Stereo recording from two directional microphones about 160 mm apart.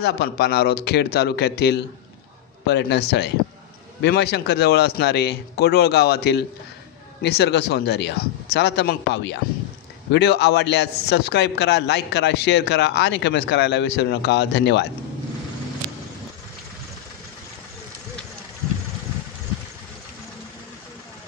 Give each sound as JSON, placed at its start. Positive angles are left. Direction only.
{"t": 0.0, "sound": "a man's voice", "side_deg": 90}